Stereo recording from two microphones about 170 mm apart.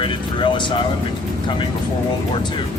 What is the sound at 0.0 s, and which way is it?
Music, 30° left (ahead or behind).